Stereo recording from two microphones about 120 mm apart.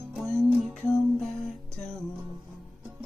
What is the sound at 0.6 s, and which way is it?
Music, 5° left (ahead or behind).